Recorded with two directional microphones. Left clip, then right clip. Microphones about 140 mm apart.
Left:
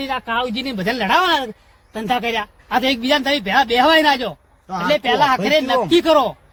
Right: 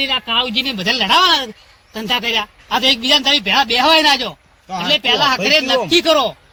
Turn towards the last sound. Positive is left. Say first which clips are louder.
# right 1 dB
turn(degrees=45)  # may be behind; listen again after turning